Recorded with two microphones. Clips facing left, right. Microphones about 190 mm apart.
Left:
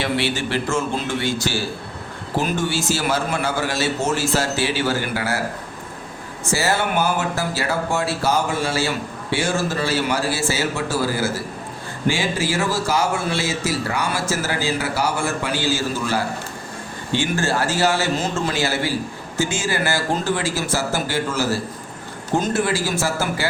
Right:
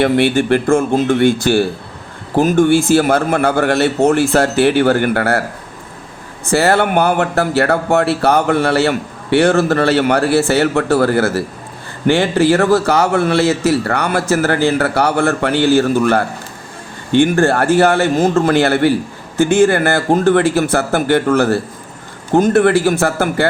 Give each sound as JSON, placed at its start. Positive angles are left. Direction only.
{"t": 0.0, "sound": "speech", "side_deg": -55}
{"t": 6.5, "sound": "speech", "side_deg": -60}